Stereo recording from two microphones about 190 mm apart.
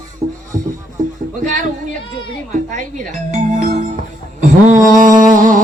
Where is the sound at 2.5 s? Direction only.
40° right (ahead or behind).